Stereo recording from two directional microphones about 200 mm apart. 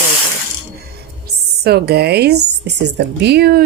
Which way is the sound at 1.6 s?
55° right (ahead or behind).